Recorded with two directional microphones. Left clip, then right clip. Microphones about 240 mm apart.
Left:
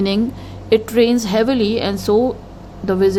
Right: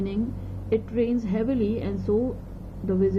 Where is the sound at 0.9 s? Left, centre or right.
Left.